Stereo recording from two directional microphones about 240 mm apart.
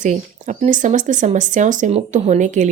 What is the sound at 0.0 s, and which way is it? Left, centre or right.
Speech, right.